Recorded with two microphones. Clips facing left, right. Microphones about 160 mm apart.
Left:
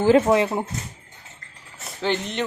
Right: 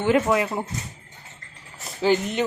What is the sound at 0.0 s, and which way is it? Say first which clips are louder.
Speech: left 4 dB; 30° left (ahead or behind).